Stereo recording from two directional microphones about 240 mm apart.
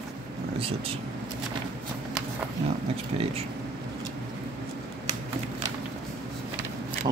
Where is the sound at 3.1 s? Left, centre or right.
Right.